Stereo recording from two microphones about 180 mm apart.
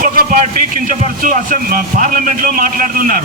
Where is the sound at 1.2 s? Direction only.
50° right (ahead or behind).